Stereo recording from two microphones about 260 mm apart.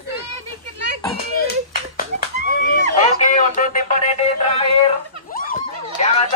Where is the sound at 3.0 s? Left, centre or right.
Left.